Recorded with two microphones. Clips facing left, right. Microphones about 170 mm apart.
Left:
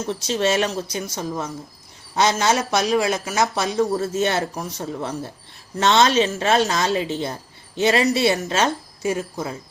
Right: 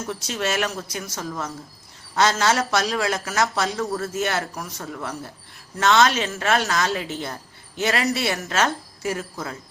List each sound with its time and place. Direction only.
0.1 s speech: 25° left (ahead or behind)